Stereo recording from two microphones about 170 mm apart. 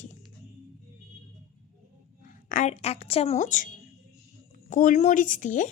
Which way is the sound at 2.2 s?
50° left (ahead or behind).